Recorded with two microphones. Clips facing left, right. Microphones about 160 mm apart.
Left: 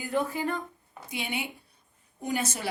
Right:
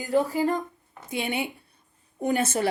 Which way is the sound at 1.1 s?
50° right (ahead or behind).